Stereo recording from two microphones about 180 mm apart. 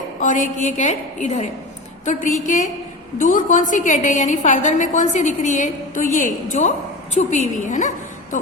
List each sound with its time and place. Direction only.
0.2 s a woman's voice: 45° left (ahead or behind)